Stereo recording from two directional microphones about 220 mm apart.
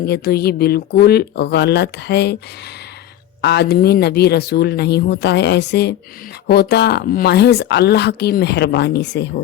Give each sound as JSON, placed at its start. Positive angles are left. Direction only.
{"t": 0.0, "sound": "speech", "side_deg": 45}
{"t": 3.4, "sound": "speech", "side_deg": 50}